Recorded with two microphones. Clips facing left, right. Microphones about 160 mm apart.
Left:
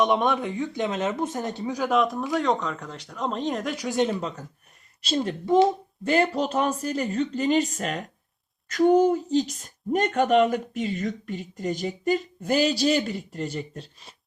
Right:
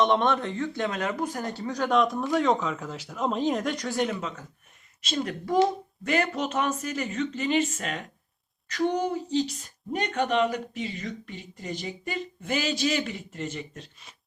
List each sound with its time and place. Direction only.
0.0 s speech: 10° left (ahead or behind)
1.7 s speech: 5° left (ahead or behind)
3.8 s speech: 25° left (ahead or behind); by 7.9 s 40° left (ahead or behind)
9.0 s speech: 45° left (ahead or behind)